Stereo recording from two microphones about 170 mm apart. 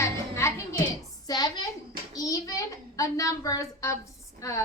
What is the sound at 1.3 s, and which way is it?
A woman's voice, 25° left (ahead or behind).